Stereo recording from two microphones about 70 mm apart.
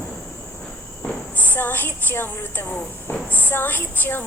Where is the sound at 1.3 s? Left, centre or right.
Left.